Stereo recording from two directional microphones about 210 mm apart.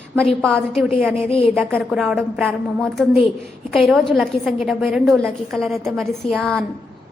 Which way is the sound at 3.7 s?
Centre (ahead or behind).